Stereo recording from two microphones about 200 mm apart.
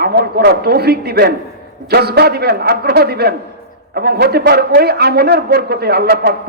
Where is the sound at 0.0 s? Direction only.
50° right (ahead or behind).